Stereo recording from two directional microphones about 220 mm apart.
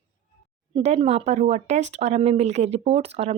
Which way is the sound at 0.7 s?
25° right (ahead or behind).